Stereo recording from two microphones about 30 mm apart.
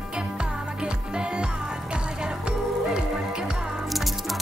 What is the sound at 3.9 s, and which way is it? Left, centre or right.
Music, centre.